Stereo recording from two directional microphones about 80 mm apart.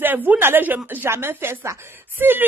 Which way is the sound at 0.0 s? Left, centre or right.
Right.